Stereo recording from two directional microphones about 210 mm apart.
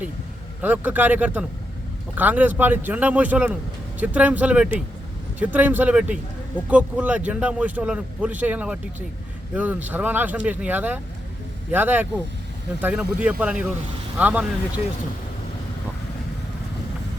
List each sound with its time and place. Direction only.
0.6 s speech: 10° right (ahead or behind)